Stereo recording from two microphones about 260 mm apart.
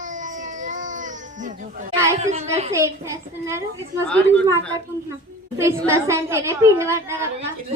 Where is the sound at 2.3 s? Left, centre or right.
Right.